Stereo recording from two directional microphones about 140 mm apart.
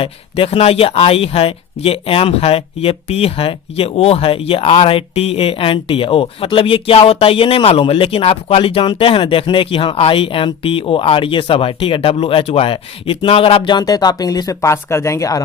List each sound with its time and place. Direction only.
0.0 s speech: 45° left (ahead or behind); by 15.4 s 25° left (ahead or behind)